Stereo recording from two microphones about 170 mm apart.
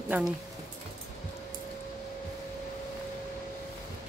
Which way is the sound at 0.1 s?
10° right (ahead or behind).